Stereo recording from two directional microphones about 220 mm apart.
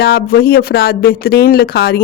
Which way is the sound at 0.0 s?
45° left (ahead or behind).